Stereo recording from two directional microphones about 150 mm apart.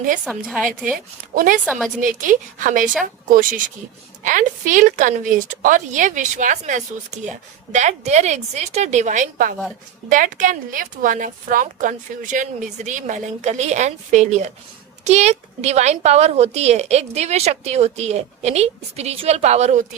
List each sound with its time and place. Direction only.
0.3 s a woman's voice: centre (ahead or behind)
0.9 s a woman's voice: 70° right (ahead or behind); by 19.8 s 45° right (ahead or behind)